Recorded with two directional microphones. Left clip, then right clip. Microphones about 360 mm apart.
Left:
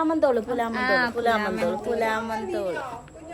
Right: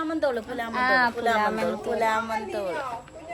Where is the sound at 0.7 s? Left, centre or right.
Centre.